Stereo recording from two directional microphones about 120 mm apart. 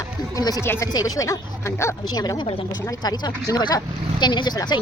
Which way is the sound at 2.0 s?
35° left (ahead or behind).